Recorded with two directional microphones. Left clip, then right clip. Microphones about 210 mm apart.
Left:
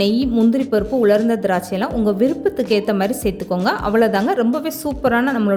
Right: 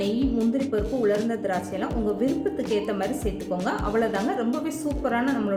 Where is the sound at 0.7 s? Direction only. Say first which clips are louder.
Left 9 dB; 45° left (ahead or behind).